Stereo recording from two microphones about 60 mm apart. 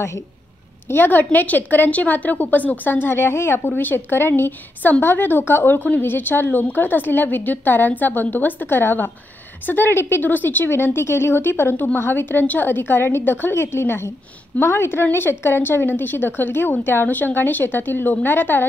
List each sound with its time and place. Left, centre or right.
0.8 s a woman's voice: left
10.2 s a woman's voice: left